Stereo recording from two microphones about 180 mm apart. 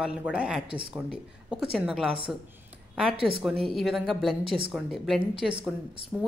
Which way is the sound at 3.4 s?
Centre (ahead or behind).